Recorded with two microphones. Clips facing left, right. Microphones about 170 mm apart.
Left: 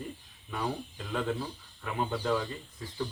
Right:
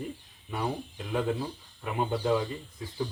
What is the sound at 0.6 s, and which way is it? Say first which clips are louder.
Speech: right 2 dB; 15° right (ahead or behind).